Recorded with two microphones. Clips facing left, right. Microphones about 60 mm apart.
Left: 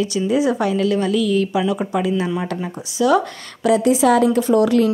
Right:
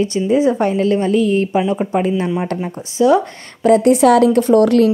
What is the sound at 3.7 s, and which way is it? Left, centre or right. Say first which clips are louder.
A woman's voice: right 4 dB; right.